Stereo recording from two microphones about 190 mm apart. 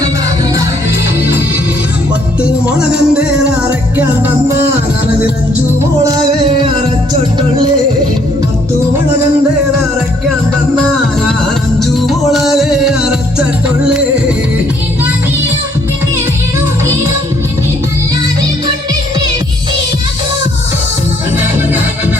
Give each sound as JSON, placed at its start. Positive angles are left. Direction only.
{"t": 2.4, "sound": "music", "side_deg": -5}
{"t": 6.4, "sound": "music", "side_deg": -30}
{"t": 11.8, "sound": "music", "side_deg": 0}